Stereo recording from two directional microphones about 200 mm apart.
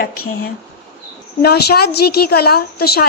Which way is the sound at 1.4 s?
55° left (ahead or behind).